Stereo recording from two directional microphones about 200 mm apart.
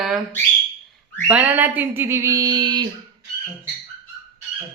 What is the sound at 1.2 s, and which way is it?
Speech, 10° right (ahead or behind).